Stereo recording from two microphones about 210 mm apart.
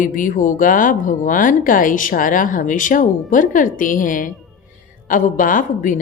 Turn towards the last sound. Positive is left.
turn(degrees=40)  # may be behind; listen again after turning